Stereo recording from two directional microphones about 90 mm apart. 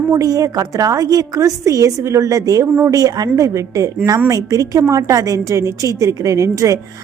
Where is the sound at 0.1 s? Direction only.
40° right (ahead or behind).